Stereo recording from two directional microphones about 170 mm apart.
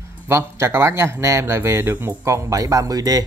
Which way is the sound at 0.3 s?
15° right (ahead or behind).